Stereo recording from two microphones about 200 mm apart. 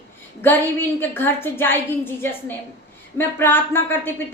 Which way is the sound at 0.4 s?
10° left (ahead or behind).